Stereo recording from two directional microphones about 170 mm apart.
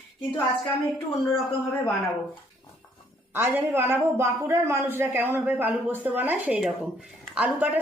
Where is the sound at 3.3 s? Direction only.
15° right (ahead or behind).